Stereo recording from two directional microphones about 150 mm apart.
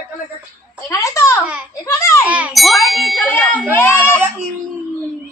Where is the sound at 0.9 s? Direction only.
20° left (ahead or behind).